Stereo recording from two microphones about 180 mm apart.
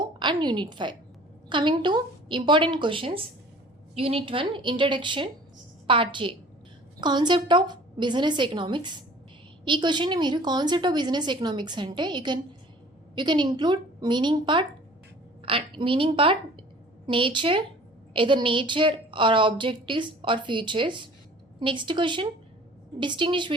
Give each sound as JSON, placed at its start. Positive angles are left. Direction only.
{"t": 0.0, "sound": "a woman's voice", "side_deg": -25}